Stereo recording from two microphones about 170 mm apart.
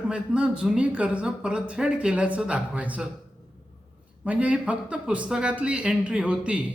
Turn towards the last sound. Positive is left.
turn(degrees=-5)  # may be behind; listen again after turning